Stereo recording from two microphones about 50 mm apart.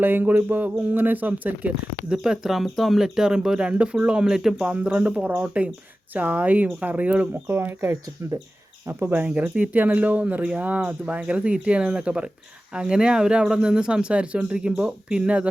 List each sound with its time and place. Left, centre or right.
0.0 s speech: right
2.0 s speech: centre
2.6 s speech: centre
4.6 s speech: right
7.4 s speech: right
8.2 s speech: right
8.9 s speech: right
9.2 s speech: right